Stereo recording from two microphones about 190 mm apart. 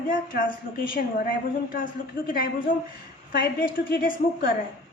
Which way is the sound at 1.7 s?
45° left (ahead or behind).